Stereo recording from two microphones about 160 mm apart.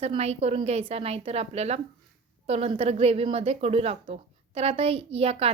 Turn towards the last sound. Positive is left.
turn(degrees=-40)  # may be behind; listen again after turning